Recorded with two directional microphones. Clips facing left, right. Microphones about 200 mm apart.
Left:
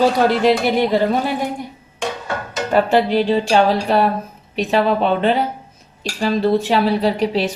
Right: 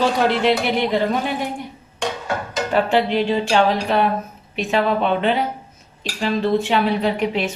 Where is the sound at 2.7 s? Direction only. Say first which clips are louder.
Left 3 dB; 40° left (ahead or behind).